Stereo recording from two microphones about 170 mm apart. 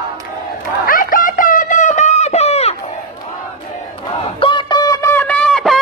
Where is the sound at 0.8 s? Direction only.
55° left (ahead or behind); by 2.7 s 40° left (ahead or behind).